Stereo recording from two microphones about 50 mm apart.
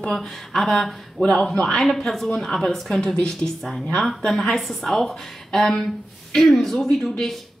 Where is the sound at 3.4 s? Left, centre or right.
Left.